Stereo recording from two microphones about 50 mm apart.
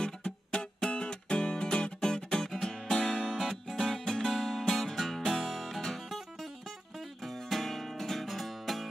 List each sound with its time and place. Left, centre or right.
0.0 s music: centre
7.2 s music: centre